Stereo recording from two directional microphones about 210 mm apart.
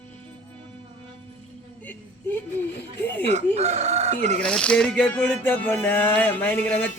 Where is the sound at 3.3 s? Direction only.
30° right (ahead or behind).